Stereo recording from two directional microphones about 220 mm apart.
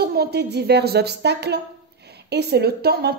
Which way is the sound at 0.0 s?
45° right (ahead or behind).